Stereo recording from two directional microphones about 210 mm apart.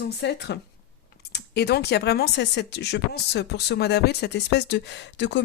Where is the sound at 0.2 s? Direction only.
55° left (ahead or behind).